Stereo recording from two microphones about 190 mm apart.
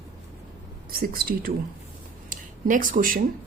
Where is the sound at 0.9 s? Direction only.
50° right (ahead or behind).